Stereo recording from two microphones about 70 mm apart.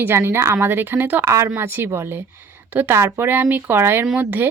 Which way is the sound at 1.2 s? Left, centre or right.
Right.